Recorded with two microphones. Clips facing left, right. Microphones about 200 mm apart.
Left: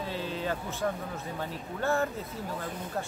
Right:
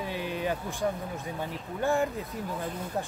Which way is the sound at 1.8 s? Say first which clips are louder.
Right 2 dB; 15° right (ahead or behind).